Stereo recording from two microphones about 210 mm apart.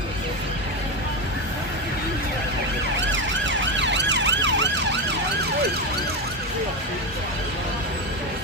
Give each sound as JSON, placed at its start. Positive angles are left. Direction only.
{"t": 3.8, "sound": "emergency vehicle", "side_deg": -55}